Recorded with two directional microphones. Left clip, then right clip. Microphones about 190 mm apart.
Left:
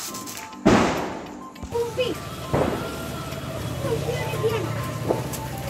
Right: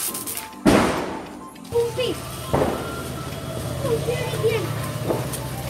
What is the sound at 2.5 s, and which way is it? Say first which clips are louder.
Rain: right 2 dB; 45° right (ahead or behind).